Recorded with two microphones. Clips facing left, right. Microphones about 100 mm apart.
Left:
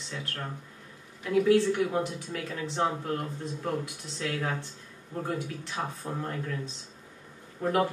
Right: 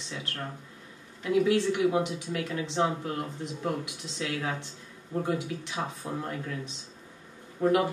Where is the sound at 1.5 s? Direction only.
15° right (ahead or behind).